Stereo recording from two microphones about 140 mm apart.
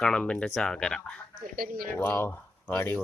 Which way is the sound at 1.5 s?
90° right.